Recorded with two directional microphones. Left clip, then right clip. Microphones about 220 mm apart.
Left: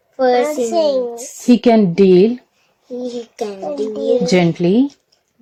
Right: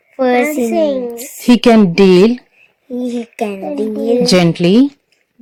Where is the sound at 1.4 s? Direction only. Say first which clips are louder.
Right 3 dB; 10° right (ahead or behind).